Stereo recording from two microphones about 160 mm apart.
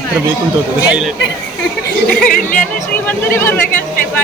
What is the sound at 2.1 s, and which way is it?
Speech, 5° left (ahead or behind).